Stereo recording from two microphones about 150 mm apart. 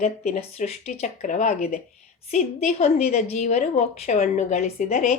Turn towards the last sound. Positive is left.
turn(degrees=55)  # may be behind; listen again after turning